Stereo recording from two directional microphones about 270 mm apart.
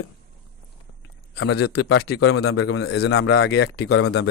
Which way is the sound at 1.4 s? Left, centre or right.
Left.